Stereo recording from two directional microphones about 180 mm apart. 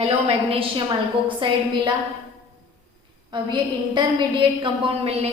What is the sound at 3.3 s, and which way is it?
A woman's voice, 25° right (ahead or behind).